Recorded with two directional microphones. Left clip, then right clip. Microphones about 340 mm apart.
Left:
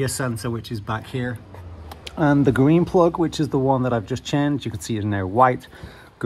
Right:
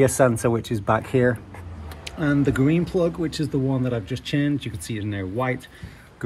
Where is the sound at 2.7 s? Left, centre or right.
Centre.